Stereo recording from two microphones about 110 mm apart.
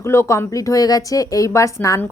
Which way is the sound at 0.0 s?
25° left (ahead or behind).